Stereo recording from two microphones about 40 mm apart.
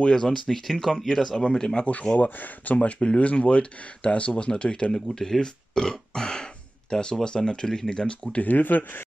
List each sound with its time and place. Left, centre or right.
0.1 s speech: centre
0.7 s speech: centre
2.1 s speech: left
4.9 s speech: centre; by 8.4 s left
8.4 s speech: left